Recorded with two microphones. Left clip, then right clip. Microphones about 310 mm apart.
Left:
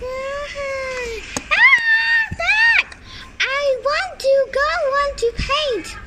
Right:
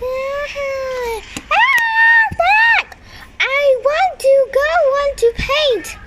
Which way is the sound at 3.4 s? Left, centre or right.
Centre.